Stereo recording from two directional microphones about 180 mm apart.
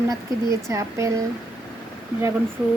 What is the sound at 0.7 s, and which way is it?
Speech, 15° right (ahead or behind).